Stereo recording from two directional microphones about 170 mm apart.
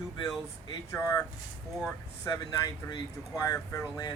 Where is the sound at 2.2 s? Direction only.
25° left (ahead or behind).